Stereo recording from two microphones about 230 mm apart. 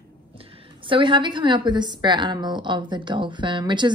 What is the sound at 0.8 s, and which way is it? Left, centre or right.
A woman's voice, right.